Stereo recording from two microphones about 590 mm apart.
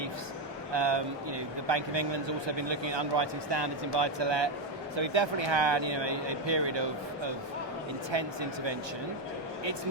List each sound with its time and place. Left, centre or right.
0.7 s a man's voice: right
8.1 s a man's voice: right